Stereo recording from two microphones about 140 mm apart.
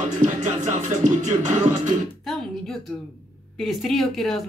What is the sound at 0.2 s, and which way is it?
Music, 60° right (ahead or behind).